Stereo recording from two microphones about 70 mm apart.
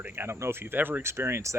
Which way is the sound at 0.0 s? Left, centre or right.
Right.